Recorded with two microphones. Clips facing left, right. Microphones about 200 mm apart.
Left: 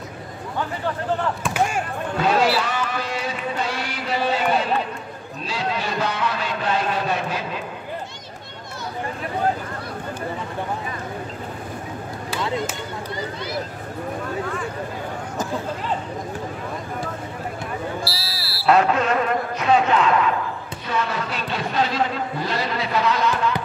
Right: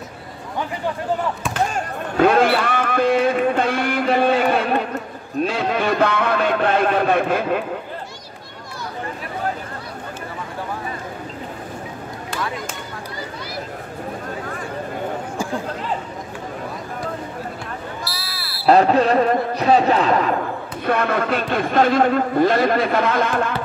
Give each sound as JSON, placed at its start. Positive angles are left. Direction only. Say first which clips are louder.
{"t": 1.4, "sound": "speech", "louder": "even", "side_deg": 10}
{"t": 2.1, "sound": "speech", "louder": "right 5 dB", "side_deg": -55}
{"t": 18.2, "sound": "smoke detector", "louder": "left 1 dB", "side_deg": -55}
{"t": 18.7, "sound": "speech", "louder": "right 4 dB", "side_deg": -35}
{"t": 20.8, "sound": "a man's voice", "louder": "right 6 dB", "side_deg": -55}